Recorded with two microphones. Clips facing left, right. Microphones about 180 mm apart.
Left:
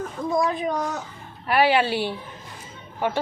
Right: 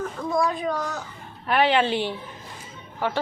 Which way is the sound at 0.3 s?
20° left (ahead or behind).